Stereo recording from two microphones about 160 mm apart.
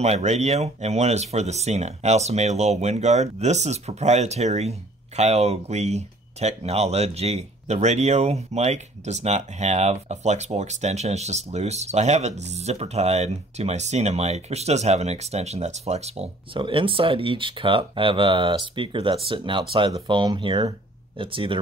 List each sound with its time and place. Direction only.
0.0 s speech: 45° right (ahead or behind)